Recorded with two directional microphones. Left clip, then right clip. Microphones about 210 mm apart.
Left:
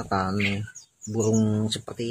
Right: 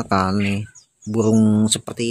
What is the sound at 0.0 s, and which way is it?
Speech, 40° right (ahead or behind).